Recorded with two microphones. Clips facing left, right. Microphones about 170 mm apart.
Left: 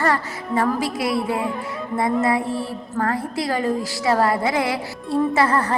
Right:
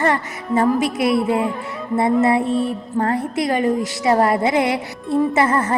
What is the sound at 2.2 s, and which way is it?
Speech, 25° right (ahead or behind).